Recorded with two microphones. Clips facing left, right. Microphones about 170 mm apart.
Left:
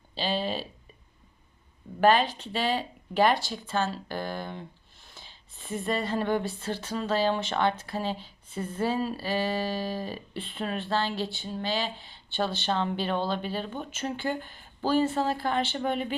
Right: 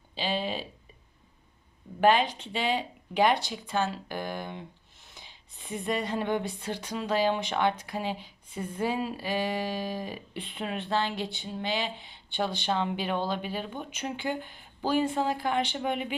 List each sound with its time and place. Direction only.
0.1 s speech: 15° right (ahead or behind)
2.0 s speech: 15° right (ahead or behind)